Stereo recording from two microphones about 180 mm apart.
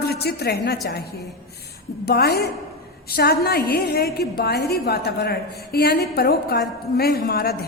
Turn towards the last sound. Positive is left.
turn(degrees=60)  # may be behind; listen again after turning